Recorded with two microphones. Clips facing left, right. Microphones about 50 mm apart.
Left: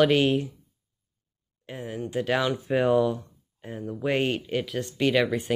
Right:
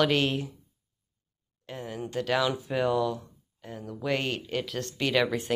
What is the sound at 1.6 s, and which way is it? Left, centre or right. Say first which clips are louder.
Speech: left 2 dB; centre.